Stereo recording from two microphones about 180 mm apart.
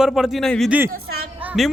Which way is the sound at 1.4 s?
5° right (ahead or behind).